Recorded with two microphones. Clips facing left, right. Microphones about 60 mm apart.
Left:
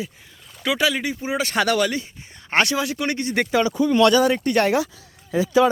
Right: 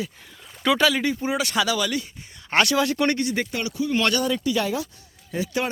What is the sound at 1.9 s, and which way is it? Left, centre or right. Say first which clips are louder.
Speech: even; left.